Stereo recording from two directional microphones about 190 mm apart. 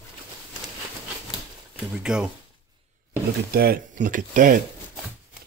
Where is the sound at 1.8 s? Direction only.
5° right (ahead or behind).